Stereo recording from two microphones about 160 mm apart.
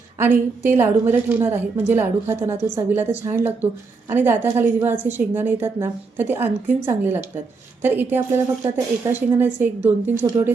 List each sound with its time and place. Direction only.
0.2 s a woman's voice: 15° right (ahead or behind)